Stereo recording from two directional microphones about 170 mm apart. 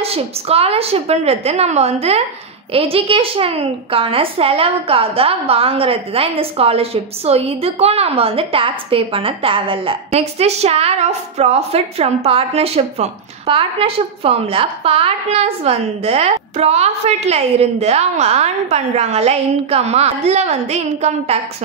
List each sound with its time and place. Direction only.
0.0 s a woman's voice: 35° right (ahead or behind)